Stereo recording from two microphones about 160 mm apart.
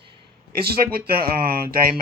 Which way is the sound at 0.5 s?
70° right (ahead or behind).